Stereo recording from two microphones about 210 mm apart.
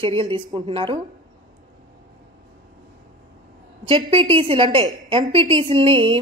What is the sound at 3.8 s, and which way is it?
Speech, 25° right (ahead or behind).